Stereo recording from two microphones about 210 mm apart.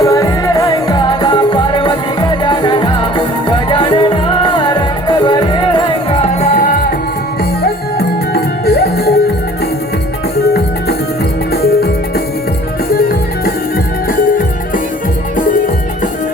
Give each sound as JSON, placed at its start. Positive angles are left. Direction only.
{"t": 0.0, "sound": "music", "side_deg": 15}
{"t": 11.5, "sound": "music", "side_deg": 45}